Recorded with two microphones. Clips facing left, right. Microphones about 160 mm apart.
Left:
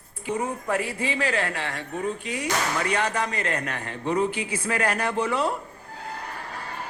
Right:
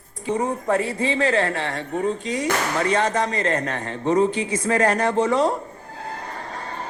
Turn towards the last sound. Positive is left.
turn(degrees=-30)  # may be behind; listen again after turning